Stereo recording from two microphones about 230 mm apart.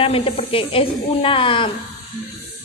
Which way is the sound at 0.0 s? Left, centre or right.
Left.